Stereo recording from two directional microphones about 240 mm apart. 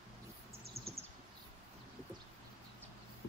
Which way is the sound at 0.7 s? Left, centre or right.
Right.